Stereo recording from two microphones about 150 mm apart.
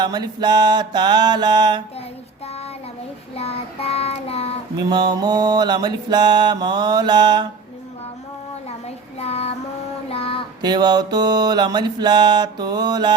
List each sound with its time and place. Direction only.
0.0 s mantra: 30° right (ahead or behind)
3.3 s child singing: 40° left (ahead or behind)
4.8 s mantra: 30° right (ahead or behind)
9.1 s child singing: 45° left (ahead or behind)
10.6 s mantra: 30° right (ahead or behind)